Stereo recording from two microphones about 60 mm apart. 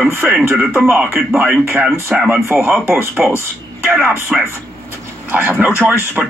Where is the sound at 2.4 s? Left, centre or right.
Right.